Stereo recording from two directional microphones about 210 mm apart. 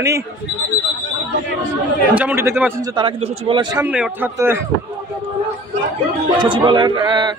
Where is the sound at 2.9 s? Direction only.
25° right (ahead or behind).